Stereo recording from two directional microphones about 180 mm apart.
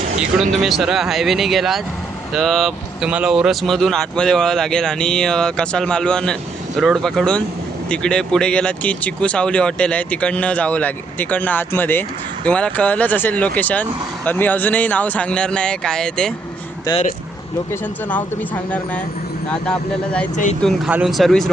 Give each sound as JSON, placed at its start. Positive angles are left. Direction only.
{"t": 0.5, "sound": "speech", "side_deg": 0}
{"t": 18.1, "sound": "speech", "side_deg": 10}
{"t": 20.3, "sound": "speech", "side_deg": 45}
{"t": 20.6, "sound": "speech", "side_deg": 0}